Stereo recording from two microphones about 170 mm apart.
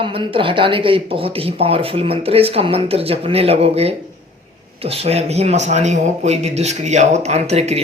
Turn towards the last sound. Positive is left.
turn(degrees=-40)  # may be behind; listen again after turning